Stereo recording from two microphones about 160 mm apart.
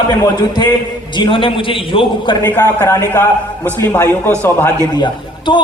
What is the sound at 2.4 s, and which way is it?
A man's voice, 15° left (ahead or behind).